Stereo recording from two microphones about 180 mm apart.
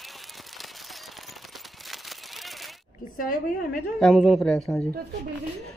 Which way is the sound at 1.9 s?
Centre (ahead or behind).